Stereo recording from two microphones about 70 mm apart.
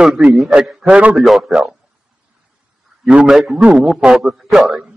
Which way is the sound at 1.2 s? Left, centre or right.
Centre.